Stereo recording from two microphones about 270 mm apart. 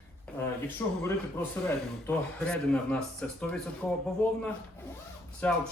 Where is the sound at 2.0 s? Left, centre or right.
Centre.